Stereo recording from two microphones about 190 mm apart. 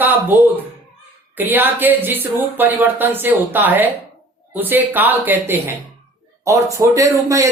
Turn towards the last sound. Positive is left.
turn(degrees=-15)  # may be behind; listen again after turning